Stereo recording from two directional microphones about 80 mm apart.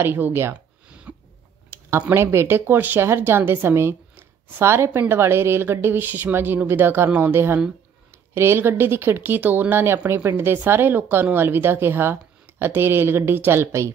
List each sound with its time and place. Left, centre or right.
0.0 s a woman's voice: right
0.5 s a sound: centre
1.7 s a woman's voice: right